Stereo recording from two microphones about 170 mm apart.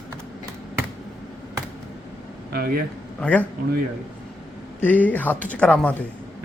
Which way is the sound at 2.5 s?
65° right (ahead or behind).